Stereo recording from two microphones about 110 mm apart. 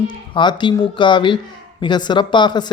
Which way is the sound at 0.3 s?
45° left (ahead or behind).